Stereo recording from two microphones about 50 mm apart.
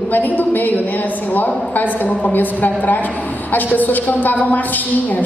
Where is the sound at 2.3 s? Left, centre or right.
Left.